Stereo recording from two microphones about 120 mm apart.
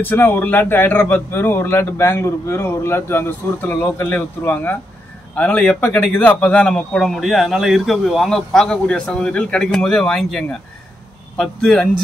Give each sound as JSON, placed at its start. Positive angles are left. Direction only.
{"t": 0.0, "sound": "a man's voice", "side_deg": 15}